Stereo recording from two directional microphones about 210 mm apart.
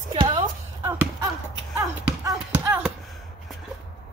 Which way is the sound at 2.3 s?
10° right (ahead or behind).